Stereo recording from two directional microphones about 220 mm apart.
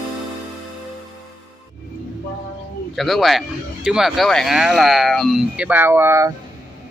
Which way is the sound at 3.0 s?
Centre (ahead or behind).